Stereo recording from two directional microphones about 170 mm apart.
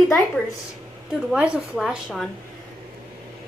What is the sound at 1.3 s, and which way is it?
Speech, 5° right (ahead or behind).